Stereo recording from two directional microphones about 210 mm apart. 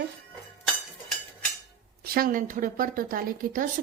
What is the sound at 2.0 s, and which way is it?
A woman's voice, 45° right (ahead or behind).